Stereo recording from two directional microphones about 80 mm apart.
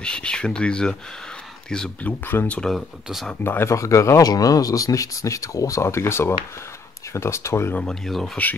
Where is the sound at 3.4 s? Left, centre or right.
Left.